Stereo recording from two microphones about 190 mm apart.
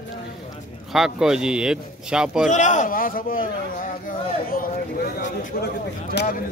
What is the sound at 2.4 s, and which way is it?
Speech, 40° left (ahead or behind).